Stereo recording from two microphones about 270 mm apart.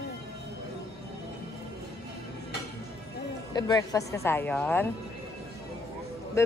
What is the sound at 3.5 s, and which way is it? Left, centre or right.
Speech, centre.